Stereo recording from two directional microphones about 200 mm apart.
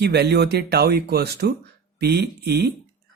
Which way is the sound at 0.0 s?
55° right (ahead or behind).